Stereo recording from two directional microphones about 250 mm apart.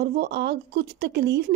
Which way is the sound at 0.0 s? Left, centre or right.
Right.